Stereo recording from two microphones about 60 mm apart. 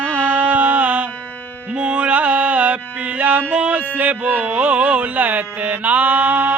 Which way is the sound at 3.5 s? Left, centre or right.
Right.